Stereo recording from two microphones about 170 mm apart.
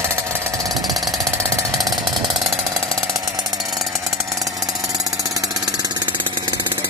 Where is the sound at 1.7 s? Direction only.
25° right (ahead or behind).